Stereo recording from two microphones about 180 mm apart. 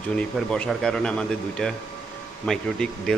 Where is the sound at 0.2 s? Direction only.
5° left (ahead or behind).